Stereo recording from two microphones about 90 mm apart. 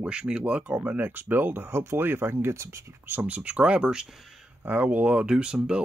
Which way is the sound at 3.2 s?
15° right (ahead or behind).